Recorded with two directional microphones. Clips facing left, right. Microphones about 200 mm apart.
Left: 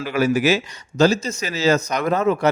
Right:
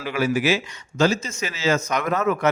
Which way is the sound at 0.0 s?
40° left (ahead or behind).